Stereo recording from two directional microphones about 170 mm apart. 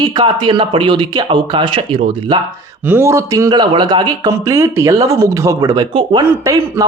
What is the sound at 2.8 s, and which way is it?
Speech, 15° right (ahead or behind).